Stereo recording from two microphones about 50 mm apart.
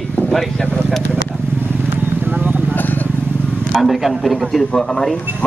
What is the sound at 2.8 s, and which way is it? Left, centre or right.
Vehicle, left.